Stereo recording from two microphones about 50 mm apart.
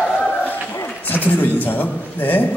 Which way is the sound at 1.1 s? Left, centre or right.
Left.